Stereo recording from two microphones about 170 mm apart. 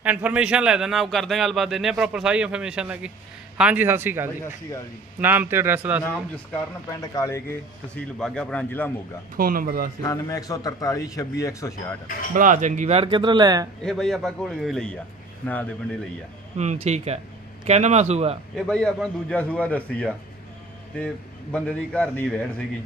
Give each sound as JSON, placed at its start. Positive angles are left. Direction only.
{"t": 0.0, "sound": "a man's voice", "side_deg": -10}
{"t": 6.1, "sound": "a man's voice", "side_deg": 10}
{"t": 9.3, "sound": "speech", "side_deg": -55}
{"t": 10.0, "sound": "a man's voice", "side_deg": 20}
{"t": 12.3, "sound": "speech", "side_deg": -50}
{"t": 13.8, "sound": "a man's voice", "side_deg": 0}
{"t": 16.6, "sound": "speech", "side_deg": -40}
{"t": 18.5, "sound": "a man's voice", "side_deg": 5}
{"t": 21.5, "sound": "a man's voice", "side_deg": 5}